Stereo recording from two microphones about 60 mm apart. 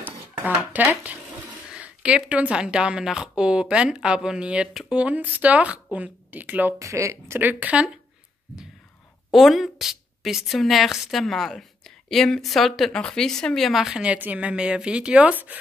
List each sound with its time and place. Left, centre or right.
0.6 s speech: right
6.8 s speech: right
7.3 s a woman's voice: right
7.7 s speech: centre
9.3 s a woman's voice: centre
12.9 s a woman's voice: centre
14.0 s speech: right